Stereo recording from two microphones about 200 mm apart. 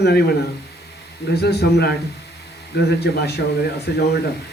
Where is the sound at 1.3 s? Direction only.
55° left (ahead or behind).